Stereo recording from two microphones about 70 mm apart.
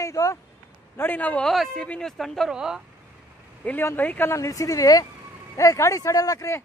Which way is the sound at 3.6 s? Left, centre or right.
Left.